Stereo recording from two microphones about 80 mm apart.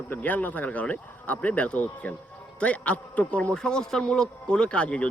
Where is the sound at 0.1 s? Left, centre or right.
Left.